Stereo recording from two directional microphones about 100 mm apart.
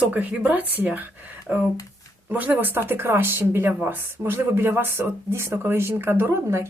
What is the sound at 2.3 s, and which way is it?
Speech, 15° right (ahead or behind).